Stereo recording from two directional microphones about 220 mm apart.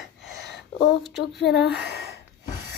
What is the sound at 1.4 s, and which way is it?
Speech, 50° left (ahead or behind).